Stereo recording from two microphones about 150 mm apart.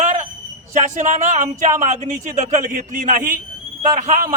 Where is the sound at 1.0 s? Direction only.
55° right (ahead or behind).